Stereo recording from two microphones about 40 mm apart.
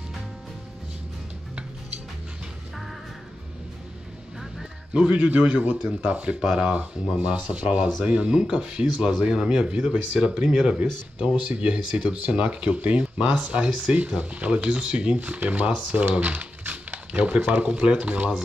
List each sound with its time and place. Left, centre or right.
4.9 s speech: right
5.3 s speech: right
6.4 s speech: right
6.8 s speech: right
11.2 s speech: right
16.2 s typing: right
17.6 s speech: right